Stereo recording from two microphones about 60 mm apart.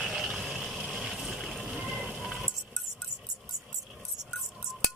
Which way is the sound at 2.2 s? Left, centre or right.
Centre.